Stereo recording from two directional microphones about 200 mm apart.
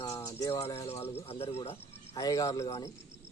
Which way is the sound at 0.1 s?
15° left (ahead or behind).